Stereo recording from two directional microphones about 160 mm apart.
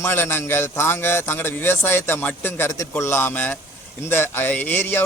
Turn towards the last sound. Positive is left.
turn(degrees=15)  # may be behind; listen again after turning